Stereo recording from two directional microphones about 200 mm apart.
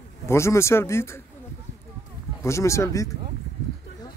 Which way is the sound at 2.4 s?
15° left (ahead or behind).